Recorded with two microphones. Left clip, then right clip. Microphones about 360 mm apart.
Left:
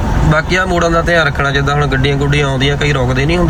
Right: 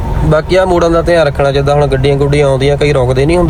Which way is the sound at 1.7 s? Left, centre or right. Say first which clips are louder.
Right 4 dB; centre.